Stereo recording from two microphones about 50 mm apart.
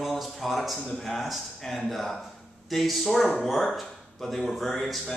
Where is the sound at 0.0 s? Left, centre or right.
Centre.